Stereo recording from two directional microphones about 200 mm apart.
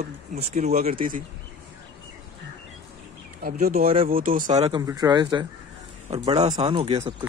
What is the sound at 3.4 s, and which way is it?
Speech, 45° right (ahead or behind).